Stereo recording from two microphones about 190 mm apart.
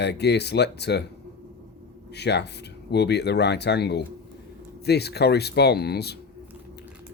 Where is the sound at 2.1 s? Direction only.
60° left (ahead or behind).